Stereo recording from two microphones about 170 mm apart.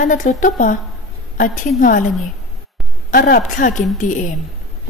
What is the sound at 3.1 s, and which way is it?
A woman's voice, 55° left (ahead or behind).